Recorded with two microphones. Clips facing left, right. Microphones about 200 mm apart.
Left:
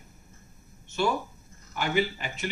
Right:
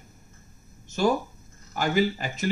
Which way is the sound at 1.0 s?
40° right (ahead or behind).